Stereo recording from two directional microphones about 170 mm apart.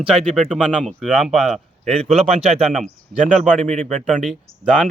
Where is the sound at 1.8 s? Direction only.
35° right (ahead or behind).